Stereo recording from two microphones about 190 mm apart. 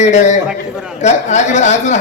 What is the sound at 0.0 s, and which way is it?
Speech, 40° left (ahead or behind).